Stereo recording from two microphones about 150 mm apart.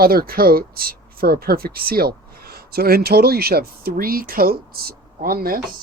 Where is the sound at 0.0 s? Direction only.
85° right.